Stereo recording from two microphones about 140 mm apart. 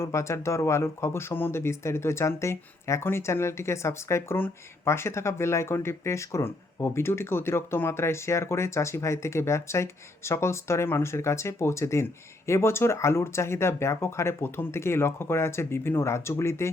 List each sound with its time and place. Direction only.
0.0 s speech: 20° left (ahead or behind)